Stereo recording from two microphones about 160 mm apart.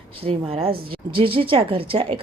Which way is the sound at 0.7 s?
70° right (ahead or behind).